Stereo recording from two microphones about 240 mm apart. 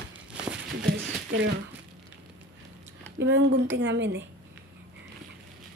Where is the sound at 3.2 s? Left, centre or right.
Right.